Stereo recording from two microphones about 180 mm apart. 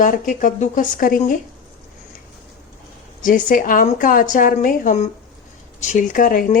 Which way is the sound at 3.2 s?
50° left (ahead or behind).